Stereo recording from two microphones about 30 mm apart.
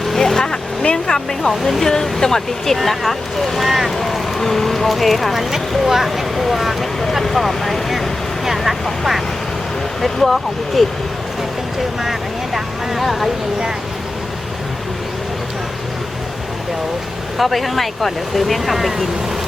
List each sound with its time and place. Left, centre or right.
0.3 s vehicle: left
1.0 s speech: centre
2.7 s speech: centre
3.7 s speech: centre
3.9 s speech: centre
5.3 s speech: centre
6.3 s speech: centre
13.0 s speech: centre
17.3 s speech: centre